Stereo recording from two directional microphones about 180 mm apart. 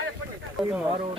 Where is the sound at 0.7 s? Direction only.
5° right (ahead or behind).